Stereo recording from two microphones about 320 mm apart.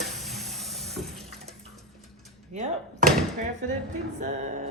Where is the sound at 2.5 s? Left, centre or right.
Right.